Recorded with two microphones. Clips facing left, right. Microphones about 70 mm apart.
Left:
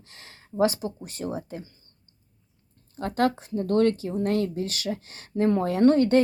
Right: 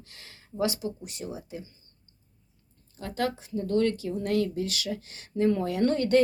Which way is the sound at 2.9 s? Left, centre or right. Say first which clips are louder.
Left 6 dB; left.